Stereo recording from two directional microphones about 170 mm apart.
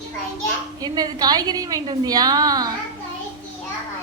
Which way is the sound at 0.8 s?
20° right (ahead or behind).